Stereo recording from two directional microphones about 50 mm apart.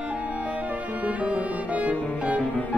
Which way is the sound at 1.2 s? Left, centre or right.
Right.